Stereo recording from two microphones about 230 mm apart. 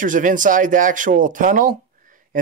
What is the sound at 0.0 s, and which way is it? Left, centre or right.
Speech, right.